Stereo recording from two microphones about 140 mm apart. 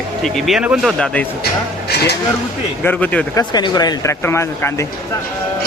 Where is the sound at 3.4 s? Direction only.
30° left (ahead or behind).